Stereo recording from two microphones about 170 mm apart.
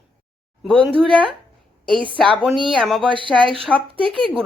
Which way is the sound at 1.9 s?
30° right (ahead or behind).